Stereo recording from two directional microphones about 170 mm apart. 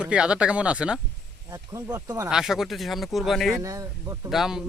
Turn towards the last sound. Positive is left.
turn(degrees=0)  # may be behind; listen again after turning